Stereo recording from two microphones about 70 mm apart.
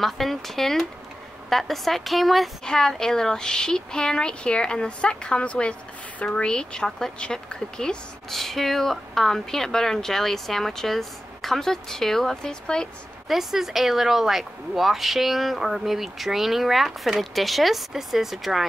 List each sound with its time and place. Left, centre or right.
0.0 s speech: centre
13.3 s speech: centre